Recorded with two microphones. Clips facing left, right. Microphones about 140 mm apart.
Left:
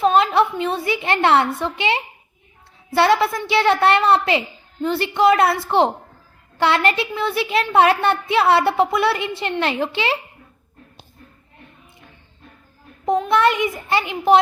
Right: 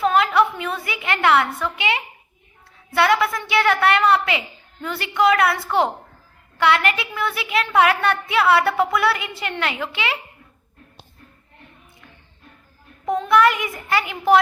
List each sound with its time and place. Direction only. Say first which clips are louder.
0.0 s a woman's voice: left 2 dB; 25° left (ahead or behind)
13.1 s a woman's voice: even; 25° left (ahead or behind)